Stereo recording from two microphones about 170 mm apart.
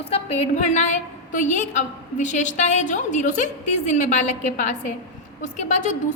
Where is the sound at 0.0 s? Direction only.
35° left (ahead or behind).